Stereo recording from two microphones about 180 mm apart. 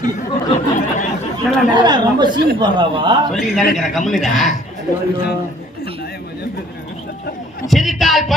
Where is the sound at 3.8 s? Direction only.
Centre (ahead or behind).